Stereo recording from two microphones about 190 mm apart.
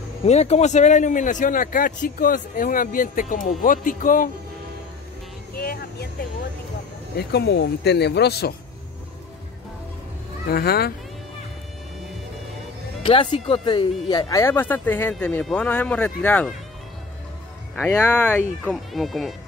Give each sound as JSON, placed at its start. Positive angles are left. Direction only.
{"t": 0.2, "sound": "speech", "side_deg": 35}
{"t": 5.6, "sound": "a sound", "side_deg": 55}
{"t": 7.2, "sound": "speech", "side_deg": 60}
{"t": 10.5, "sound": "speech", "side_deg": 55}
{"t": 13.0, "sound": "speech", "side_deg": 25}
{"t": 17.9, "sound": "speech", "side_deg": 10}
{"t": 18.6, "sound": "speech", "side_deg": 0}